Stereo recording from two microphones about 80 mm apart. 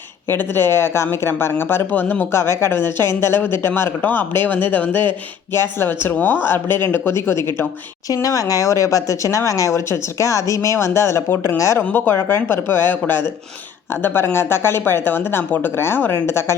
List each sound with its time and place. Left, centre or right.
0.3 s a woman's voice: left
8.1 s speech: left
11.8 s a woman's voice: left